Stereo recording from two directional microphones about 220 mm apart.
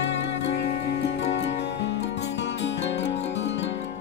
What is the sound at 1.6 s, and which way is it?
Music, 55° left (ahead or behind).